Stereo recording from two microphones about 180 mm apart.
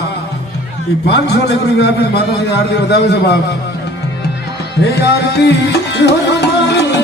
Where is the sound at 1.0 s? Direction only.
70° left (ahead or behind).